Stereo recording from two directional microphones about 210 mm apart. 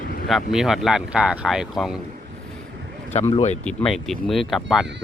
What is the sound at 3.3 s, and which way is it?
Speech, 35° left (ahead or behind).